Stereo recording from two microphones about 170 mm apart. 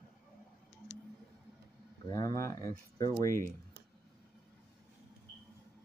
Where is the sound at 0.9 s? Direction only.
90° left.